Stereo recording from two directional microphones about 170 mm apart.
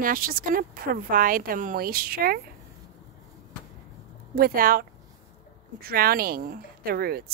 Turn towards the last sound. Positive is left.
turn(degrees=-65)  # may be behind; listen again after turning